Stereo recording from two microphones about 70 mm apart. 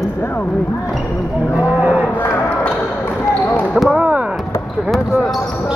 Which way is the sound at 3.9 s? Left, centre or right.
Centre.